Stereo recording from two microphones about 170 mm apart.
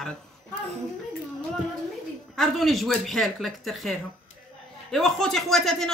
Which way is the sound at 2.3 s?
Centre (ahead or behind).